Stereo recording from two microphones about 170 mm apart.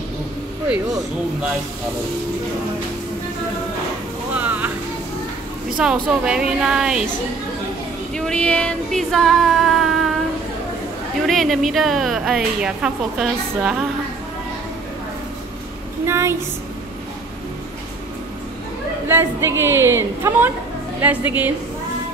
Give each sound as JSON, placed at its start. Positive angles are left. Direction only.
{"t": 4.4, "sound": "a sound", "side_deg": -10}
{"t": 5.8, "sound": "a woman's voice", "side_deg": -5}
{"t": 8.1, "sound": "female singing", "side_deg": 5}
{"t": 11.2, "sound": "a woman's voice", "side_deg": 0}
{"t": 16.1, "sound": "a woman's voice", "side_deg": -15}
{"t": 19.0, "sound": "a woman's voice", "side_deg": -15}